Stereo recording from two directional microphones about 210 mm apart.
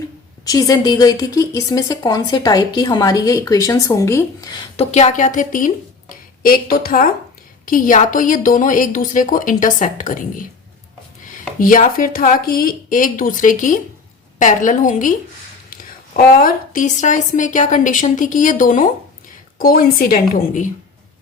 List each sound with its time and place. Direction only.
0.4 s speech: 15° left (ahead or behind)
4.9 s a woman's voice: 35° left (ahead or behind)
11.6 s a woman's voice: 40° left (ahead or behind)